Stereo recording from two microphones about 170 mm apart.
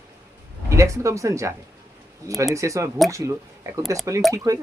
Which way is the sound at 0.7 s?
15° right (ahead or behind).